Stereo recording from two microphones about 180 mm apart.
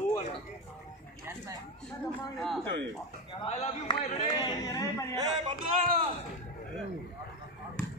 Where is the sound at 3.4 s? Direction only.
25° left (ahead or behind).